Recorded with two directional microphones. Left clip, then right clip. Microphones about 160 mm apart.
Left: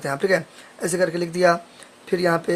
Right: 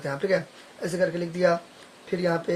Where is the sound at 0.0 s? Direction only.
45° left (ahead or behind).